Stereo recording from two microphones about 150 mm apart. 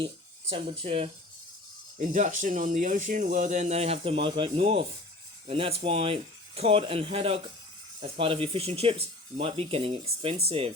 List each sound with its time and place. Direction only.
0.5 s speech: 35° right (ahead or behind)
2.0 s speech: 60° right (ahead or behind); by 10.7 s 40° right (ahead or behind)